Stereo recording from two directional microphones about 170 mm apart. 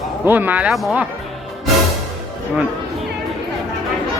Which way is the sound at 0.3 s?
10° right (ahead or behind).